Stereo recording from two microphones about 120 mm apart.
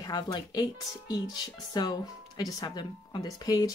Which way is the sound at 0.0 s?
35° left (ahead or behind).